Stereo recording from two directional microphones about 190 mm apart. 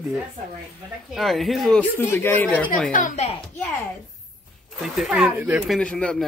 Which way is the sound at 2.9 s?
40° left (ahead or behind).